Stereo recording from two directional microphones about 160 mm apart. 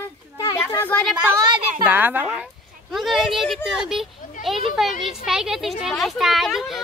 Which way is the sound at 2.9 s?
Centre (ahead or behind).